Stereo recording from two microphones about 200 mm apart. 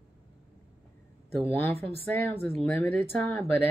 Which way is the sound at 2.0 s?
10° left (ahead or behind).